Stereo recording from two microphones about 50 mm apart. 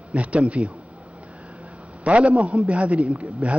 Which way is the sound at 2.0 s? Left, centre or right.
Right.